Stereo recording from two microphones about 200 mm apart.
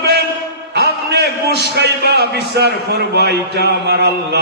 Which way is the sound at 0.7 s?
55° right (ahead or behind).